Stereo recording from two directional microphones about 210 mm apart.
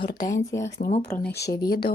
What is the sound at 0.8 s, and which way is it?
Speech, 40° left (ahead or behind).